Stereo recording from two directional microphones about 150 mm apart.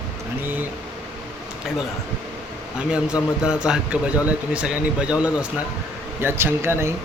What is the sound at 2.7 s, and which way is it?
A man's voice, 5° right (ahead or behind).